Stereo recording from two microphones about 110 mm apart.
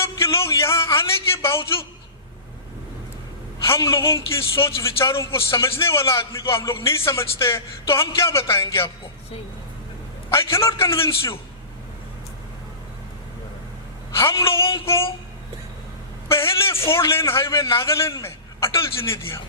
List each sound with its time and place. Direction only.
0.0 s a sound: 25° left (ahead or behind)
3.7 s a man's voice: 25° left (ahead or behind)
10.3 s a man's voice: 25° left (ahead or behind)
16.3 s a man's voice: 25° left (ahead or behind)